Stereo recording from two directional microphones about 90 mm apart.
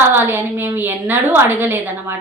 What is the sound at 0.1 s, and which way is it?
A woman's voice, 25° right (ahead or behind).